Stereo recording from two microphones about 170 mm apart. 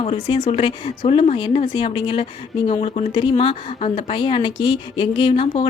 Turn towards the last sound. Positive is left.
turn(degrees=30)  # may be behind; listen again after turning